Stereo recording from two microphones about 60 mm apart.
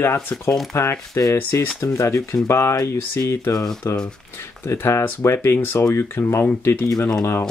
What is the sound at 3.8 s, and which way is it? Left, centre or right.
Speech, left.